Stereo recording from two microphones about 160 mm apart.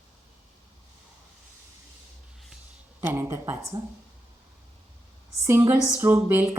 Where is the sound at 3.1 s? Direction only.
15° right (ahead or behind).